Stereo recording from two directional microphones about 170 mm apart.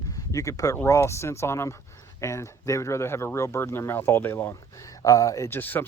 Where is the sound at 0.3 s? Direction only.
20° left (ahead or behind).